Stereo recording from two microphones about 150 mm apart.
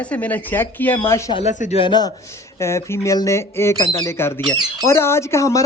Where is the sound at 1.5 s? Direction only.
55° left (ahead or behind).